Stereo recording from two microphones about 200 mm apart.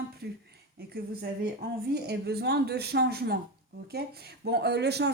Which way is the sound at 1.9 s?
55° right (ahead or behind).